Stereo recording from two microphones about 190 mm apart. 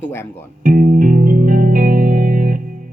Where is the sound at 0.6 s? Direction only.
45° right (ahead or behind).